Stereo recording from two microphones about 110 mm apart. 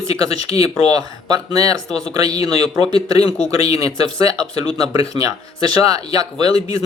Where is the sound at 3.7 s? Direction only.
35° right (ahead or behind).